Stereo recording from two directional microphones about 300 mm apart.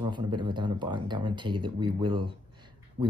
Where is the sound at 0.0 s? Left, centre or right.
Centre.